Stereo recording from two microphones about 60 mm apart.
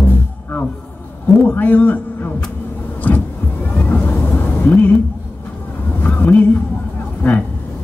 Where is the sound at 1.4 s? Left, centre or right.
Left.